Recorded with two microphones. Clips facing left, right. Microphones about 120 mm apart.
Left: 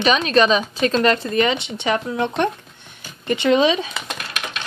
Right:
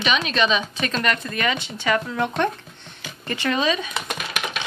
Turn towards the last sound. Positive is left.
turn(degrees=-5)  # may be behind; listen again after turning